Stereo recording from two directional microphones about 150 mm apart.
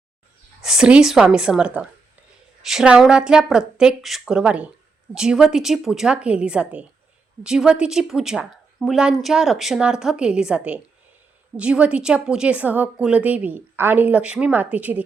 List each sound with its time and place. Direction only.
0.6 s a woman's voice: 5° right (ahead or behind)